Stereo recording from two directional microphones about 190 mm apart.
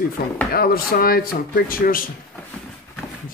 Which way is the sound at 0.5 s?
50° left (ahead or behind).